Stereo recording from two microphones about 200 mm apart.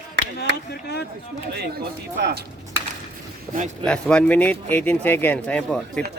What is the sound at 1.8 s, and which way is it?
Speech, 50° right (ahead or behind).